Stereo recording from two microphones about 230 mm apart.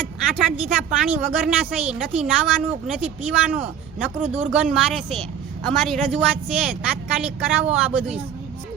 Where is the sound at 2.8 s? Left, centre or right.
Centre.